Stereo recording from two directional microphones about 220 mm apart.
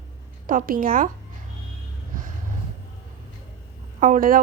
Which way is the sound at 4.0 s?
40° right (ahead or behind).